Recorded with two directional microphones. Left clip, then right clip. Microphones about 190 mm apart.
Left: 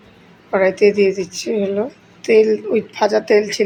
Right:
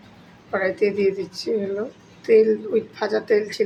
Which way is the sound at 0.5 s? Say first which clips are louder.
Left 8 dB; 35° left (ahead or behind).